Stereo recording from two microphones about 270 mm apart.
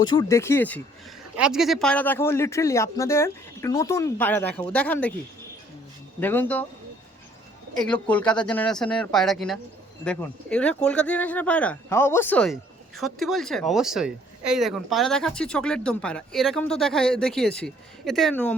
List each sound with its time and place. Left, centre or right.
0.0 s speech: centre
6.1 s speech: centre
7.8 s speech: centre